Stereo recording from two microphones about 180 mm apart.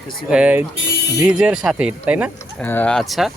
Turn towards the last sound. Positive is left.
turn(degrees=0)  # may be behind; listen again after turning